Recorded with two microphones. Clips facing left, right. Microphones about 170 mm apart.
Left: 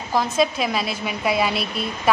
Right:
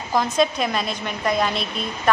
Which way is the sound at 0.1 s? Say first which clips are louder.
Even; 5° left (ahead or behind).